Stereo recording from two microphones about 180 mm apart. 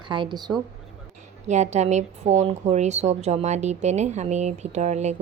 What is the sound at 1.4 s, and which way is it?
Speech, 40° right (ahead or behind).